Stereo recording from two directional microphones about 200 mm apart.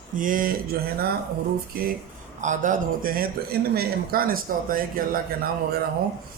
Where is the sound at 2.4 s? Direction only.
40° right (ahead or behind).